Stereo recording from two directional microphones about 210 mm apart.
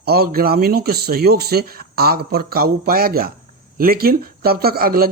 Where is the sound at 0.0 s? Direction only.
45° right (ahead or behind).